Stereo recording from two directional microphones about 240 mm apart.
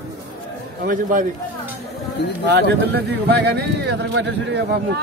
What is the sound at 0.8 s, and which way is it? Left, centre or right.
Speech, right.